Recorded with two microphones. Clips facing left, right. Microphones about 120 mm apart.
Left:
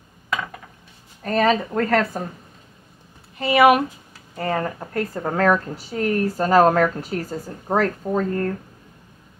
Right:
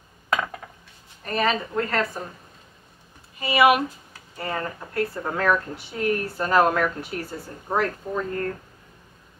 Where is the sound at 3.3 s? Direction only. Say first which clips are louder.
Left 4 dB; 55° left (ahead or behind); by 8.5 s 35° left (ahead or behind).